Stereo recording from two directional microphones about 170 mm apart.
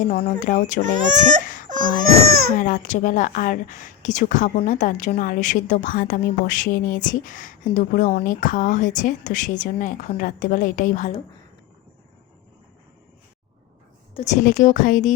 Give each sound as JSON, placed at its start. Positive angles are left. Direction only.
{"t": 0.1, "sound": "speech", "side_deg": 45}
{"t": 0.8, "sound": "speech", "side_deg": -50}
{"t": 1.6, "sound": "baby cry", "side_deg": -50}
{"t": 2.6, "sound": "speech", "side_deg": 50}
{"t": 14.1, "sound": "a woman's voice", "side_deg": 35}
{"t": 14.4, "sound": "speech", "side_deg": 50}